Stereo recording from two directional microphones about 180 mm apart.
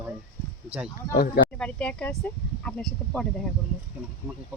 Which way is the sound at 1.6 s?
5° left (ahead or behind).